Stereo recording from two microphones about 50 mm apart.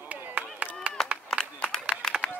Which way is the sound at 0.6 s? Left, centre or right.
Right.